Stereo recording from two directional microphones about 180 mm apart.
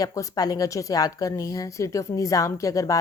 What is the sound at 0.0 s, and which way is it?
A woman's voice, 20° left (ahead or behind).